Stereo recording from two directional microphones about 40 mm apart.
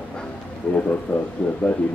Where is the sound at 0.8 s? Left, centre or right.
Left.